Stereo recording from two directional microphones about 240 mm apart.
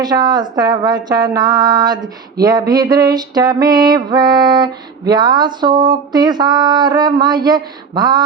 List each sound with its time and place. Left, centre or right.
0.0 s speech: centre